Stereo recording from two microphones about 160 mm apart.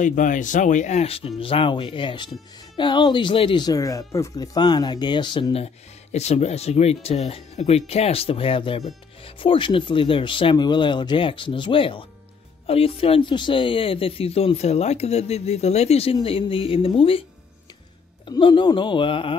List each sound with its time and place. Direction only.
0.0 s speech: 55° left (ahead or behind); by 17.2 s 35° left (ahead or behind)
18.2 s speech: 30° left (ahead or behind)